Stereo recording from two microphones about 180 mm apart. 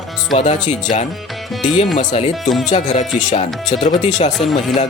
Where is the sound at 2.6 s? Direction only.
40° left (ahead or behind).